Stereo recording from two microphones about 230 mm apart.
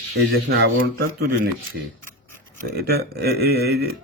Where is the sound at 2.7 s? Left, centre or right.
Right.